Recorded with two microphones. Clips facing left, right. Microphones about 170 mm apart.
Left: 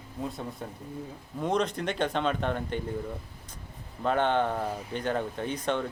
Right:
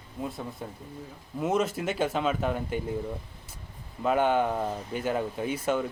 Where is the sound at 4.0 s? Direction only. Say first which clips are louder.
Right 1 dB; 10° right (ahead or behind).